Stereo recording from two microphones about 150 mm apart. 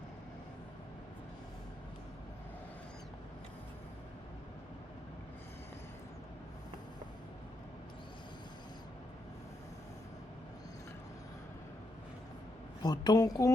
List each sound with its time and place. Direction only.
12.8 s a woman's voice: 25° left (ahead or behind)